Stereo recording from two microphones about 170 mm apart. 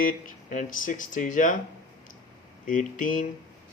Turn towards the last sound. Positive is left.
turn(degrees=50)  # may be behind; listen again after turning